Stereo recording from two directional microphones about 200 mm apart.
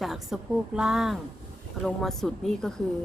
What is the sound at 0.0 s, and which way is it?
Speech, centre (ahead or behind).